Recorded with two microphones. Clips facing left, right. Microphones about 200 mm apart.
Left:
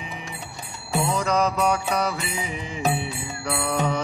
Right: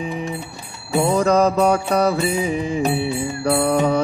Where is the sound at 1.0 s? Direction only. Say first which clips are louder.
Right 8 dB; 55° right (ahead or behind).